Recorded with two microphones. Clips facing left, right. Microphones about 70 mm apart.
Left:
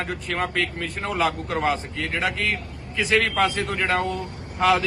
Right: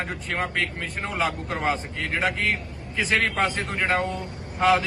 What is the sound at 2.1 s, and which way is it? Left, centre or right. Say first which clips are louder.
Speech: right 1 dB; centre.